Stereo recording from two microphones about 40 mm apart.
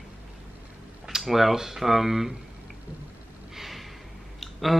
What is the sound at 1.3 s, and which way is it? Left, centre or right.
Speech, centre.